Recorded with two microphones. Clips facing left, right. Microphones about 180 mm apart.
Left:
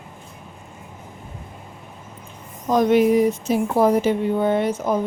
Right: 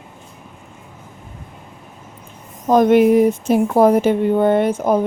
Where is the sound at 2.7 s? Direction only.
55° right (ahead or behind).